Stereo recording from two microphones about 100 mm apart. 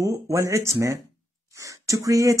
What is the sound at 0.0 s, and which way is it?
Speech, 30° right (ahead or behind).